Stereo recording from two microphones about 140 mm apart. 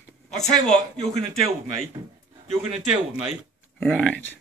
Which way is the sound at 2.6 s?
45° right (ahead or behind).